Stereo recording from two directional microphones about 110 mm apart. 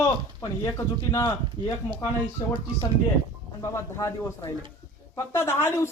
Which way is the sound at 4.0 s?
30° left (ahead or behind).